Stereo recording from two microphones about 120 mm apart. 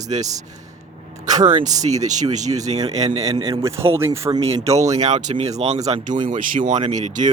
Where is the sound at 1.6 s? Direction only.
80° right; by 3.3 s 65° right (ahead or behind).